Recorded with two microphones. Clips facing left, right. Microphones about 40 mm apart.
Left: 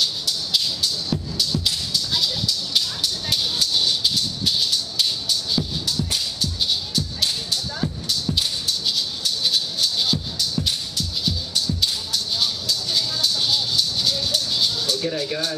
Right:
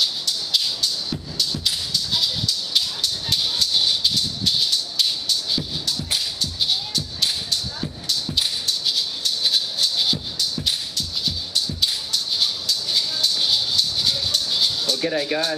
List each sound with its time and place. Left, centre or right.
0.0 s maraca: centre
1.1 s music: centre
3.7 s maraca: centre
6.4 s music: centre
8.1 s maraca: centre
15.0 s speech: right